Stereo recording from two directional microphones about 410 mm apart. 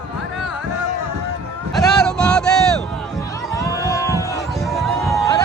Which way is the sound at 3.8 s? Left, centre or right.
Centre.